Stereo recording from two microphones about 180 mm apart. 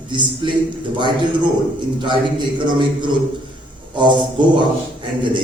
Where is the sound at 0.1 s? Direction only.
25° right (ahead or behind).